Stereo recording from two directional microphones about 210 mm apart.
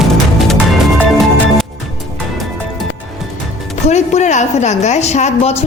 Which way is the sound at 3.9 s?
35° left (ahead or behind).